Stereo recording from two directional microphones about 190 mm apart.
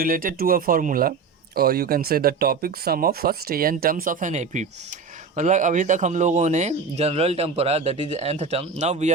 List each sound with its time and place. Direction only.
0.0 s speech: 45° right (ahead or behind)